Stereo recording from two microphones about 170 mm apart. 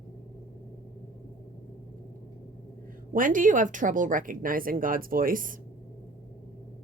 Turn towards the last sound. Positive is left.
turn(degrees=-55)  # may be behind; listen again after turning